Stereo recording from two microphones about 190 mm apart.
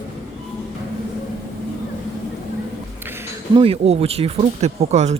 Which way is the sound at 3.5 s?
30° right (ahead or behind).